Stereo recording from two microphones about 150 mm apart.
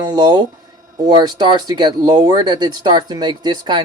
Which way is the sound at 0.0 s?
25° right (ahead or behind).